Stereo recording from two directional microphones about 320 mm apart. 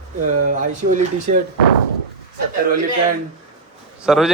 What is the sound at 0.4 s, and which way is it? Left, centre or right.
Speech, right.